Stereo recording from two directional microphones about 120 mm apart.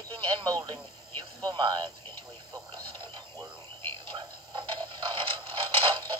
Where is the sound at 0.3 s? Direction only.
40° right (ahead or behind).